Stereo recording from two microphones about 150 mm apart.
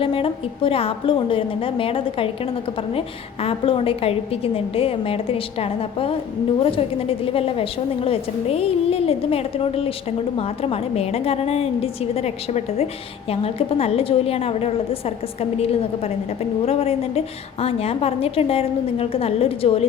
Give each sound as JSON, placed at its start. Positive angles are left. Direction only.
{"t": 0.0, "sound": "a woman's voice", "side_deg": 35}